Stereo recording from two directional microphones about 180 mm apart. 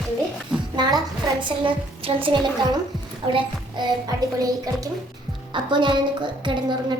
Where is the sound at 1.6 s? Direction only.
30° right (ahead or behind).